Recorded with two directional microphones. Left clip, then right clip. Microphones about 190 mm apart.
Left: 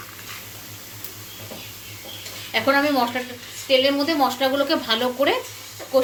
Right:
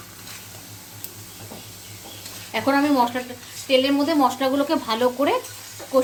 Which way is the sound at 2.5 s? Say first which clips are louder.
Left 1 dB; 55° right (ahead or behind).